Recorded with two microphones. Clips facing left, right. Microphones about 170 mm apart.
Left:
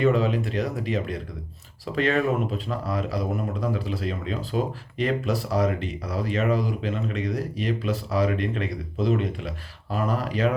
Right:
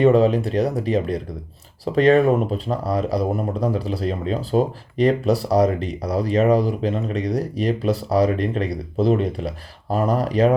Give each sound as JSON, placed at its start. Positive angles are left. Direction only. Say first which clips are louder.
{"t": 0.0, "sound": "speech", "louder": "right 7 dB", "side_deg": -35}